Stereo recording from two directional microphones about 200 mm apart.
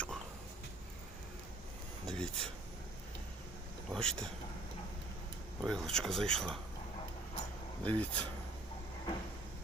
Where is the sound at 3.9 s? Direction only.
5° left (ahead or behind).